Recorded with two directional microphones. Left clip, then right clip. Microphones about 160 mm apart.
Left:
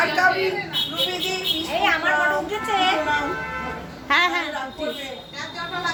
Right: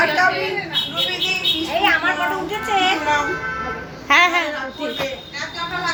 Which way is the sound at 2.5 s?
Centre (ahead or behind).